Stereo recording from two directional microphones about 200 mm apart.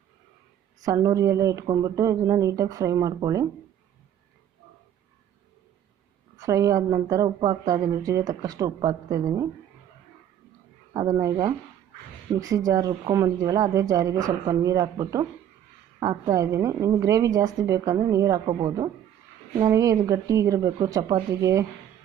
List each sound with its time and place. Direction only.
0.9 s a woman's voice: 15° right (ahead or behind)
6.4 s a woman's voice: 15° right (ahead or behind)
10.9 s a woman's voice: 20° right (ahead or behind)